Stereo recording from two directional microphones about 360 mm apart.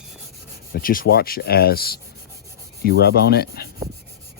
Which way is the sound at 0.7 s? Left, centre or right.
Left.